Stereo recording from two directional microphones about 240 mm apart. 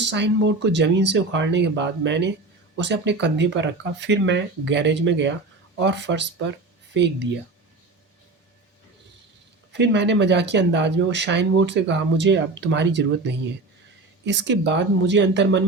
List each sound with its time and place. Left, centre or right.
0.0 s speech: right
9.7 s speech: right